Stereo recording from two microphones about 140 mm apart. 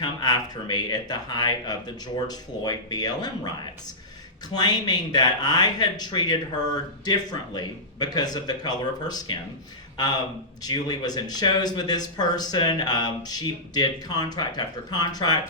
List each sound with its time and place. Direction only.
0.0 s speech: 30° left (ahead or behind)